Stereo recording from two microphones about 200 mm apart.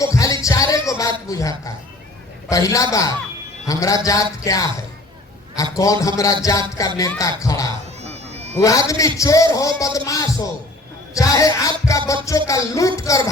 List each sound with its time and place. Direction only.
0.0 s music: 15° left (ahead or behind)
1.3 s a man's voice: 15° left (ahead or behind)
5.7 s a man's voice: 15° left (ahead or behind)
8.0 s a sound: 35° right (ahead or behind)
8.5 s a man's voice: 15° left (ahead or behind)